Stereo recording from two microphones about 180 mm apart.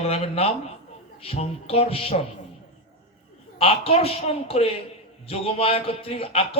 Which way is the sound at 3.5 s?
30° left (ahead or behind).